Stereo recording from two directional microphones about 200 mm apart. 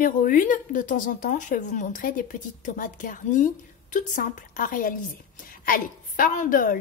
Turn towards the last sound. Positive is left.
turn(degrees=45)  # may be behind; listen again after turning